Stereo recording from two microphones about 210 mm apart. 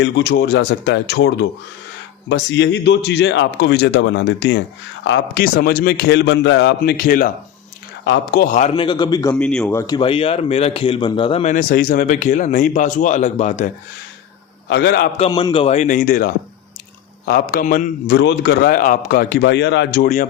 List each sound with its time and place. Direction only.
0.0 s a man's voice: 50° left (ahead or behind)
8.0 s a man's voice: 55° left (ahead or behind); by 8.7 s 35° left (ahead or behind)
8.7 s a man's voice: 25° left (ahead or behind)
9.3 s a man's voice: 5° left (ahead or behind); by 11.5 s 25° left (ahead or behind)
11.5 s a man's voice: 45° left (ahead or behind)
14.7 s a man's voice: 55° left (ahead or behind)
15.3 s a man's voice: 20° left (ahead or behind); by 17.8 s 40° left (ahead or behind)
18.1 s a man's voice: 55° left (ahead or behind)